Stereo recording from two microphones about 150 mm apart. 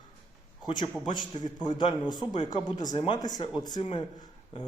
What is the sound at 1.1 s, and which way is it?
A man's voice, 30° left (ahead or behind).